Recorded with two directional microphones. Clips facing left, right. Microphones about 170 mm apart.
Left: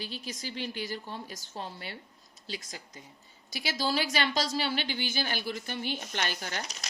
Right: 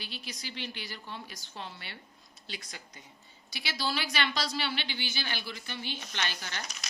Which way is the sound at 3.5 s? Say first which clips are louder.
Left 4 dB; 45° left (ahead or behind).